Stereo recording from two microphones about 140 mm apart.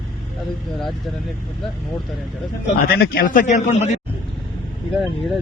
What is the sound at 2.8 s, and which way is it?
Speech, 90° left.